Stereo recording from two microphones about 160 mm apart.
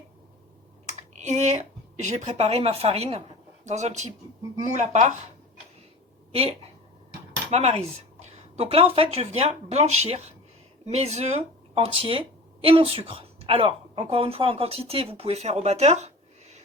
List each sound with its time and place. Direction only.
0.9 s speech: 45° right (ahead or behind)
7.5 s a woman's voice: 40° right (ahead or behind)